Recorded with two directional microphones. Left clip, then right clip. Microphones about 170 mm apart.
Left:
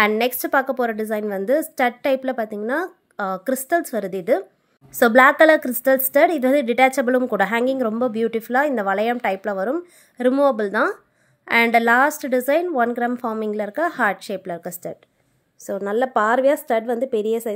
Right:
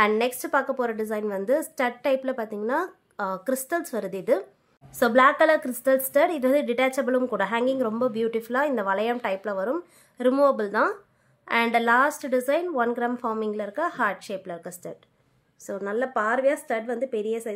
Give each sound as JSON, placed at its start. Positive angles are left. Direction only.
{"t": 0.0, "sound": "a woman's voice", "side_deg": 25}
{"t": 4.9, "sound": "a woman's voice", "side_deg": 35}